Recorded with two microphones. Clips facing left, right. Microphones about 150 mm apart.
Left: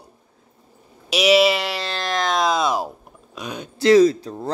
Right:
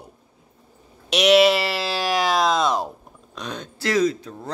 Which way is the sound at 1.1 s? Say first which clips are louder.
Right 1 dB; centre (ahead or behind).